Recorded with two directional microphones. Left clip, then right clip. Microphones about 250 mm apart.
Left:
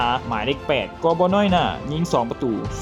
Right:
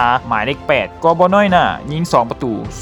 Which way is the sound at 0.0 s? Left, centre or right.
Right.